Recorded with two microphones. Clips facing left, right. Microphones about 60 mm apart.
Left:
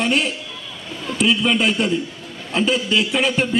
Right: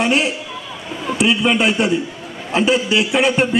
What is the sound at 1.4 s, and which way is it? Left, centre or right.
Music, centre.